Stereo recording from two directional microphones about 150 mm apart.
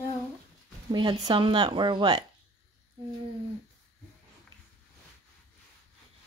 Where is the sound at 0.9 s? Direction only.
30° right (ahead or behind).